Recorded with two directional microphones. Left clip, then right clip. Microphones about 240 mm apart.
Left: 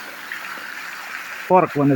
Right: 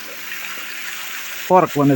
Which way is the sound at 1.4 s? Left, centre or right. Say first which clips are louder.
Right 2 dB; centre.